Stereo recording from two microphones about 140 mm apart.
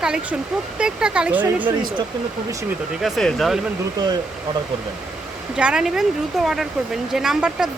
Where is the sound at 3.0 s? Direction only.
Centre (ahead or behind).